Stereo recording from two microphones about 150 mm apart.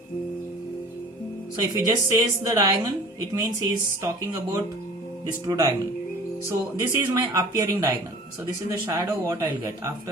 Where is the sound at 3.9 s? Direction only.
20° right (ahead or behind).